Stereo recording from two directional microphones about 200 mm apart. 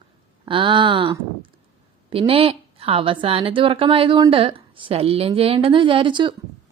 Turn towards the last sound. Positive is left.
turn(degrees=-25)  # may be behind; listen again after turning